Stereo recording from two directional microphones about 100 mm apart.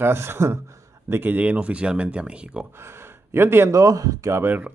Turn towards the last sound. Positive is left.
turn(degrees=-25)  # may be behind; listen again after turning